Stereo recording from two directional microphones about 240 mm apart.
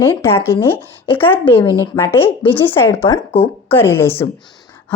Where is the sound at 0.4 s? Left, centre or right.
Centre.